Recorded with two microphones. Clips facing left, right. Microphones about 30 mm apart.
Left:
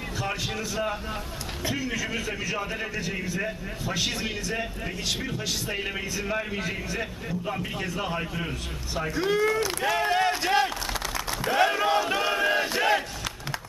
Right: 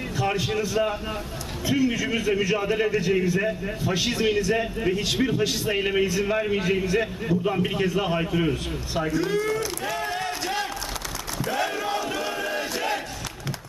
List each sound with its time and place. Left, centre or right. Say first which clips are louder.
0.2 s a man's voice: right 6 dB; centre
9.1 s speech: left 2 dB; centre
9.8 s a sound: left 4 dB; centre
11.4 s speech: left 4 dB; left
11.9 s crowd: left 3 dB; centre
12.5 s battle cry: left 3 dB; centre